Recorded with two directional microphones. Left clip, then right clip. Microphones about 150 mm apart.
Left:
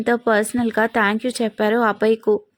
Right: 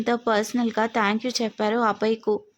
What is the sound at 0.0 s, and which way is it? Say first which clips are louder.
Speech: left 5 dB; 15° left (ahead or behind).